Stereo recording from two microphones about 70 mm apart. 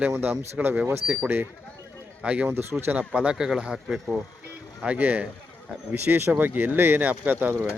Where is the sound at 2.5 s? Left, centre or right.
Right.